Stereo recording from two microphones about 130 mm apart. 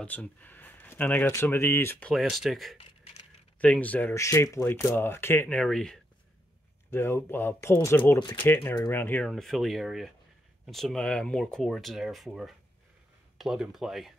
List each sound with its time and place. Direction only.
0.0 s speech: 10° left (ahead or behind)
2.1 s speech: centre (ahead or behind)
3.5 s speech: 10° left (ahead or behind)
4.1 s speech: 20° left (ahead or behind); by 5.9 s 5° left (ahead or behind)
6.9 s speech: 20° left (ahead or behind)
9.2 s speech: centre (ahead or behind)